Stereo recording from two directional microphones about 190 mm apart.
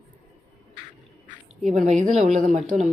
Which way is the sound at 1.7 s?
40° right (ahead or behind).